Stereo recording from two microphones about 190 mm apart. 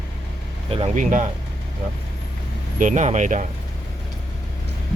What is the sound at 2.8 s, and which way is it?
Speech, 40° right (ahead or behind).